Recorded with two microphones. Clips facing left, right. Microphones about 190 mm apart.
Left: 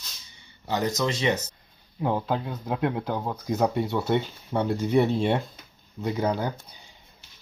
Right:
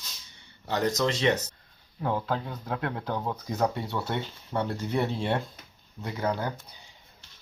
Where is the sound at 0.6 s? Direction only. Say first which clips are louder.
Even; 5° left (ahead or behind).